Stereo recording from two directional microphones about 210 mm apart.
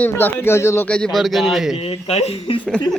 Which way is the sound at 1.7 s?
30° left (ahead or behind).